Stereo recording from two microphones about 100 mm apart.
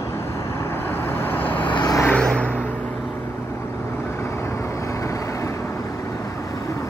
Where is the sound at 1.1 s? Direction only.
20° left (ahead or behind).